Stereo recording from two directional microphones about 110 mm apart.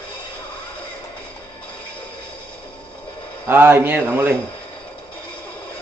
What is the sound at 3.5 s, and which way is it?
Speech, 20° right (ahead or behind).